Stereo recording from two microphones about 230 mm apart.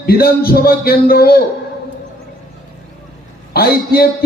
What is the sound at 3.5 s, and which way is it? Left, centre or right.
Speech, left.